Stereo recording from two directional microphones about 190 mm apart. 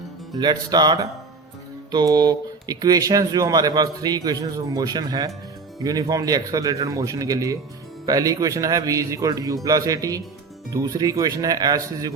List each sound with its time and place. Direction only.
0.3 s a man's voice: 20° right (ahead or behind)